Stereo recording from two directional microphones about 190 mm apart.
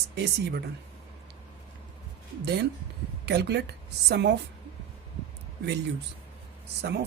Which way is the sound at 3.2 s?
60° right (ahead or behind).